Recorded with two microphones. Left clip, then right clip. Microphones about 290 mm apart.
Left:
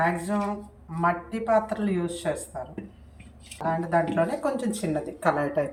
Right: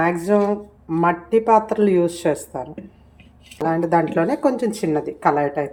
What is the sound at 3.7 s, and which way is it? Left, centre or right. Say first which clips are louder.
A woman's voice: right 6 dB; centre.